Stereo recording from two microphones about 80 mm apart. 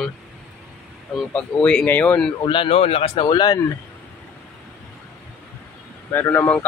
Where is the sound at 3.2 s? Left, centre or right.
Left.